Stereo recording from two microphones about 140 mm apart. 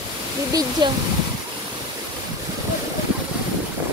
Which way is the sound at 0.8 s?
30° right (ahead or behind).